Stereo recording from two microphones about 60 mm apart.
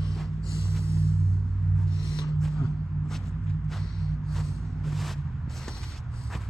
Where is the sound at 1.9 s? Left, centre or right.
Right.